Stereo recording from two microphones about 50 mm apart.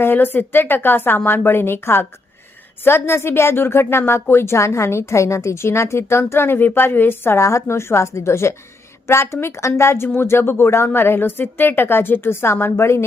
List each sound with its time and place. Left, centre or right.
0.0 s a woman's voice: left
7.3 s a woman's voice: left
10.2 s a woman's voice: left